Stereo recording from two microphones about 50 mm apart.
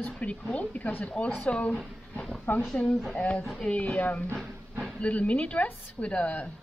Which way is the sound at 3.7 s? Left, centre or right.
Left.